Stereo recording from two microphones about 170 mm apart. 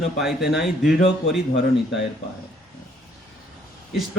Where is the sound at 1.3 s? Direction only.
90° left.